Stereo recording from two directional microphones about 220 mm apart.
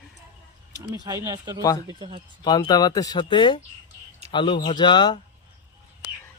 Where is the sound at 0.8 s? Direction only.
15° right (ahead or behind).